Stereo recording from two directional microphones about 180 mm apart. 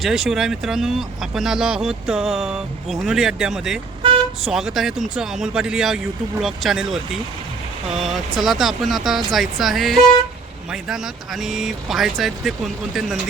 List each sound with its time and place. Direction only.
0.0 s speech: 5° right (ahead or behind)
4.0 s vehicle: 30° right (ahead or behind)
4.5 s speech: centre (ahead or behind)